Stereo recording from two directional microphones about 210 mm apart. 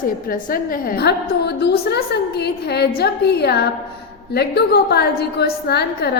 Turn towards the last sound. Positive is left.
turn(degrees=50)  # may be behind; listen again after turning